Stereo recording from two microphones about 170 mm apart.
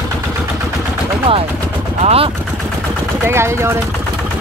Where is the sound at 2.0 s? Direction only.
35° right (ahead or behind).